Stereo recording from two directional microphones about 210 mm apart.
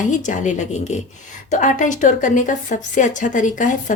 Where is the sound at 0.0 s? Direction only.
35° left (ahead or behind).